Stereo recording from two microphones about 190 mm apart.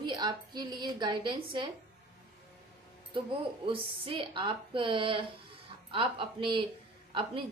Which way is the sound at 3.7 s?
25° right (ahead or behind).